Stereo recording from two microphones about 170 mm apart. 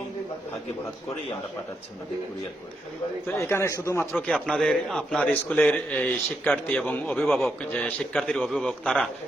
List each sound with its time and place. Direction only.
3.2 s a man's voice: 15° left (ahead or behind)
4.1 s a man's voice: centre (ahead or behind)